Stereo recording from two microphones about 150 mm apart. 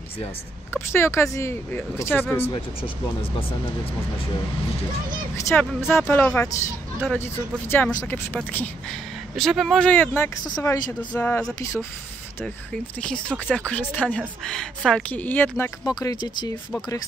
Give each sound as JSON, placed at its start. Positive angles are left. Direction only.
{"t": 0.7, "sound": "a woman's voice", "side_deg": 20}
{"t": 2.5, "sound": "speech", "side_deg": 35}
{"t": 5.3, "sound": "a woman's voice", "side_deg": 15}
{"t": 7.7, "sound": "a woman's voice", "side_deg": 15}
{"t": 9.4, "sound": "a woman's voice", "side_deg": 0}
{"t": 15.9, "sound": "speech", "side_deg": 25}